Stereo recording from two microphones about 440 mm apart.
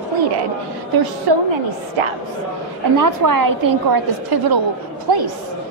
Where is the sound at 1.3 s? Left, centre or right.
Right.